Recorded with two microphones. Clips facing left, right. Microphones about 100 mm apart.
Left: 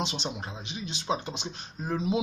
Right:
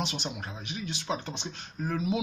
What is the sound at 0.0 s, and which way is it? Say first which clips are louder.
Speech: left 1 dB; 20° left (ahead or behind).